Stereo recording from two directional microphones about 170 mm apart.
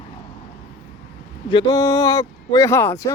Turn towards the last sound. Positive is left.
turn(degrees=15)  # may be behind; listen again after turning